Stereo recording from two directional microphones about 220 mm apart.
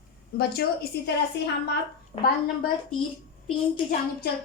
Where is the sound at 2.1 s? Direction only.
25° left (ahead or behind).